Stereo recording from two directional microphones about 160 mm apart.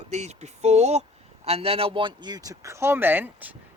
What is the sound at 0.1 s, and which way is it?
A man's voice, 45° right (ahead or behind).